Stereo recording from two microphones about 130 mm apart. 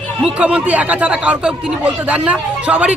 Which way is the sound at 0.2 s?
10° right (ahead or behind).